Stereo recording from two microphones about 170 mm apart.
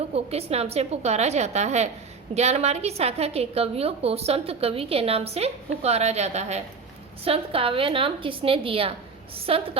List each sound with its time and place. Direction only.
0.1 s a woman's voice: 35° right (ahead or behind)